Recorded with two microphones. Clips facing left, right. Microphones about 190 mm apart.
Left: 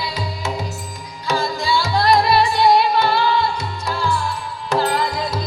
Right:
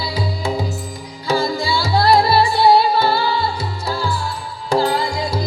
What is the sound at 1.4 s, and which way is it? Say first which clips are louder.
Music: right 1 dB; 35° right (ahead or behind).